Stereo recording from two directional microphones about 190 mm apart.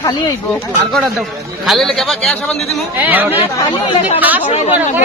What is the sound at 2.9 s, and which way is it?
Speech, 10° right (ahead or behind).